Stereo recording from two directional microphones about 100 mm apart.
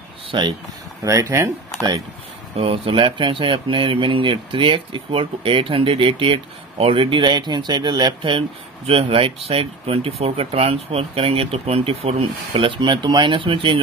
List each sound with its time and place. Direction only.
0.3 s speech: 45° right (ahead or behind)
1.0 s speech: 30° right (ahead or behind)
2.5 s speech: 70° right (ahead or behind)